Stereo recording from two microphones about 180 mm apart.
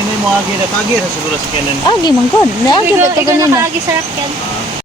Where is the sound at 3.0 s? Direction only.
15° right (ahead or behind).